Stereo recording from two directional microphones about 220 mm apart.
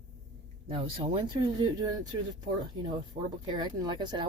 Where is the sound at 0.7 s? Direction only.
25° right (ahead or behind).